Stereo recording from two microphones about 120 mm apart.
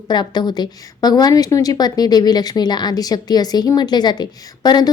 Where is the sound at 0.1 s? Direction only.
35° left (ahead or behind).